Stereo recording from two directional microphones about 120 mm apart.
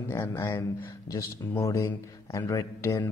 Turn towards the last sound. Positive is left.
turn(degrees=25)  # may be behind; listen again after turning